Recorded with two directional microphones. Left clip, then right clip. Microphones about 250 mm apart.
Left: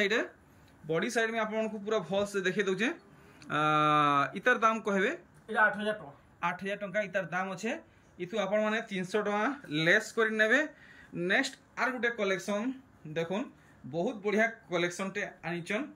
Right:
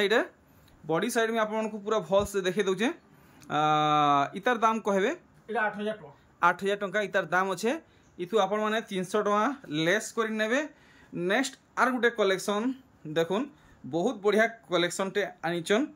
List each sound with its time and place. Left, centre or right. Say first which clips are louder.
0.0 s speech: right 4 dB; centre